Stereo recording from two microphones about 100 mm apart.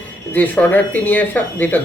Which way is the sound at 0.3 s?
20° left (ahead or behind).